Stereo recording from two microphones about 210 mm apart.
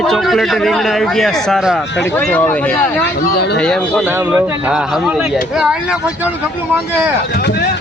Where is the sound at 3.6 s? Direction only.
Centre (ahead or behind).